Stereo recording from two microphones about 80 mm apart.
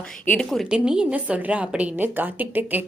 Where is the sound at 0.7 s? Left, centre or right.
Centre.